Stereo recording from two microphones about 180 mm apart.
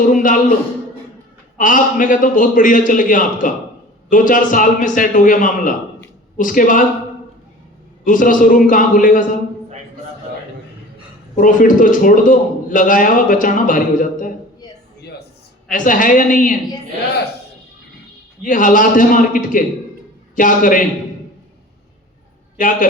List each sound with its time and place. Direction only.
0.1 s a man's voice: 45° left (ahead or behind)
1.5 s a man's voice: 45° left (ahead or behind)
8.0 s a man's voice: 45° left (ahead or behind)
11.3 s a man's voice: 45° left (ahead or behind)
15.7 s a man's voice: 45° left (ahead or behind)
18.4 s a man's voice: 50° left (ahead or behind)
22.5 s a man's voice: 50° left (ahead or behind)